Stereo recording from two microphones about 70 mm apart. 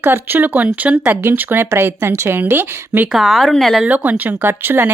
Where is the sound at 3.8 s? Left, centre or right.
Right.